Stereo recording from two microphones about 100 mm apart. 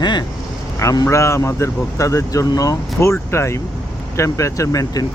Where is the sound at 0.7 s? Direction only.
35° left (ahead or behind).